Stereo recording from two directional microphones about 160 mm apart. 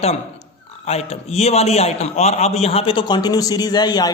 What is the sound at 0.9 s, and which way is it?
A man's voice, 40° left (ahead or behind).